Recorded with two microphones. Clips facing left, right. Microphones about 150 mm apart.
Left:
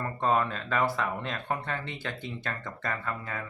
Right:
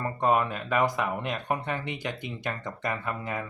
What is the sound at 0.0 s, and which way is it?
Speech, 15° right (ahead or behind).